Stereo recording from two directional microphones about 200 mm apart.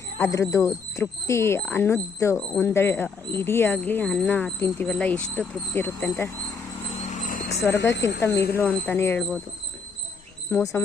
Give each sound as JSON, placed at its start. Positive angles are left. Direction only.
{"t": 0.2, "sound": "speech", "side_deg": 15}
{"t": 7.1, "sound": "a sound", "side_deg": 40}
{"t": 7.6, "sound": "speech", "side_deg": 15}
{"t": 10.5, "sound": "speech", "side_deg": 15}